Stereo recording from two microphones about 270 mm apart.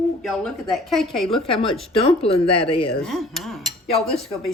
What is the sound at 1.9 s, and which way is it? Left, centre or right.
Speech, left.